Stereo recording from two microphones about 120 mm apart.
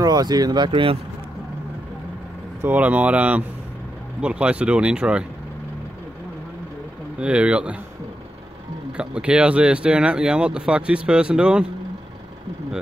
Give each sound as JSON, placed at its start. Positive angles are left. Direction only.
{"t": 0.0, "sound": "speech", "side_deg": -35}
{"t": 2.6, "sound": "speech", "side_deg": -10}
{"t": 7.2, "sound": "speech", "side_deg": -10}
{"t": 8.9, "sound": "speech", "side_deg": -10}